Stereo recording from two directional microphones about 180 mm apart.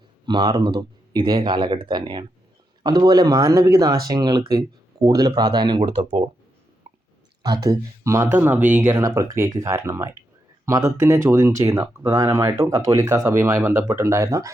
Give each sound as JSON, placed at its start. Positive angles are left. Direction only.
{"t": 0.3, "sound": "speech", "side_deg": -25}
{"t": 6.8, "sound": "a sound", "side_deg": -25}
{"t": 7.4, "sound": "speech", "side_deg": -20}